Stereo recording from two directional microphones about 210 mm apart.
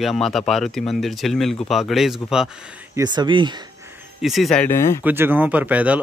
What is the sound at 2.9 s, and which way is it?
Speech, 20° right (ahead or behind).